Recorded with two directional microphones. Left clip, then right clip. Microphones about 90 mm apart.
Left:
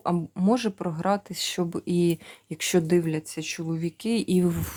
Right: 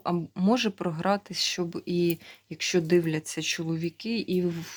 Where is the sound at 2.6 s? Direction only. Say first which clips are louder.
Left 2 dB; 50° left (ahead or behind).